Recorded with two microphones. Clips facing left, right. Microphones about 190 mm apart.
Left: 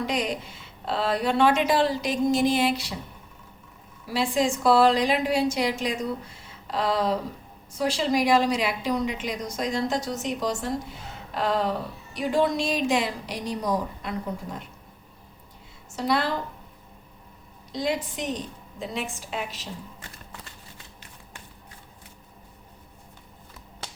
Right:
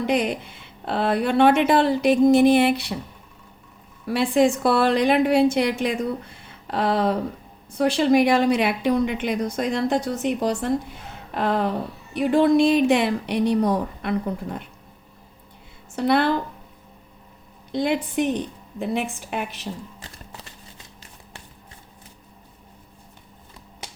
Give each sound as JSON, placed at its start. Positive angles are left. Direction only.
{"t": 0.1, "sound": "a woman's voice", "side_deg": -60}
{"t": 4.0, "sound": "a woman's voice", "side_deg": -60}
{"t": 16.0, "sound": "a woman's voice", "side_deg": -60}
{"t": 17.7, "sound": "a woman's voice", "side_deg": -60}